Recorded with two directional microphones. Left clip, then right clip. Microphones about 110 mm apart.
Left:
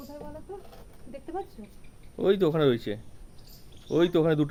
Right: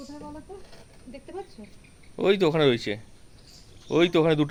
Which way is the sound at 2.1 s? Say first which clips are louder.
Right 2 dB; 15° right (ahead or behind).